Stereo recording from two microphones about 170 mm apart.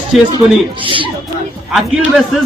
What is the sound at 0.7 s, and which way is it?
Speech, 30° right (ahead or behind).